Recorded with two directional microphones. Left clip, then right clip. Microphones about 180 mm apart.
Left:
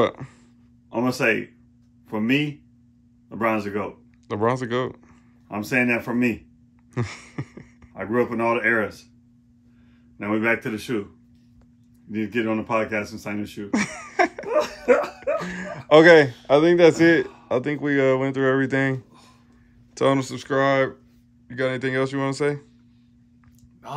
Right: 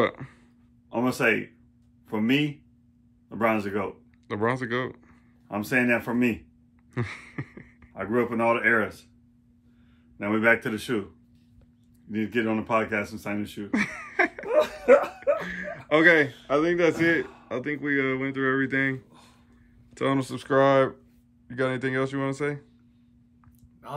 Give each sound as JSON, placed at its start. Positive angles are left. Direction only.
{"t": 0.0, "sound": "speech", "side_deg": 10}
{"t": 10.1, "sound": "speech", "side_deg": 0}
{"t": 12.1, "sound": "speech", "side_deg": 0}
{"t": 15.4, "sound": "a sound", "side_deg": 25}
{"t": 16.4, "sound": "a man's voice", "side_deg": 35}
{"t": 19.9, "sound": "a sound", "side_deg": 15}
{"t": 20.2, "sound": "speech", "side_deg": -5}